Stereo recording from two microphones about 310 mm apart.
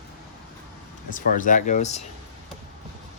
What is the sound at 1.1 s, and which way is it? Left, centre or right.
Speech, left.